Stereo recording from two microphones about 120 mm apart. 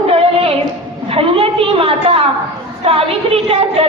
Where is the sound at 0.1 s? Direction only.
50° right (ahead or behind).